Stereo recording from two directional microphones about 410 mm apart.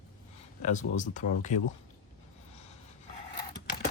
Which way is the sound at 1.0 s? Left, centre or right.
Centre.